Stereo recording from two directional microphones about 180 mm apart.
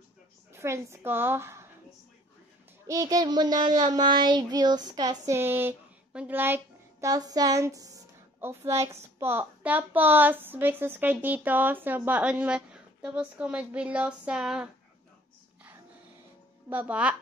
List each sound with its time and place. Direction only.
0.5 s a woman's voice: 15° right (ahead or behind)
2.9 s a woman's voice: 20° right (ahead or behind); by 14.7 s 5° right (ahead or behind)
16.6 s a woman's voice: 10° right (ahead or behind)